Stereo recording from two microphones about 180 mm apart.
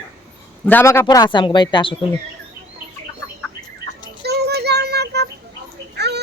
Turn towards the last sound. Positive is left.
turn(degrees=-65)  # may be behind; listen again after turning